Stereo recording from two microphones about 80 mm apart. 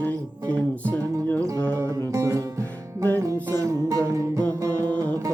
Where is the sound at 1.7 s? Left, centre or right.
Right.